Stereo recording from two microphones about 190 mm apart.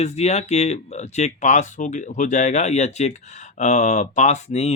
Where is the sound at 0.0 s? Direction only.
35° left (ahead or behind).